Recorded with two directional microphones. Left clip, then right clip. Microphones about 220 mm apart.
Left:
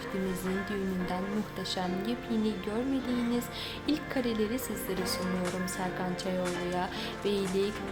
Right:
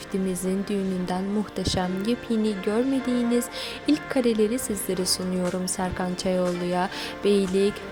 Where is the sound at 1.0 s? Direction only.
30° right (ahead or behind).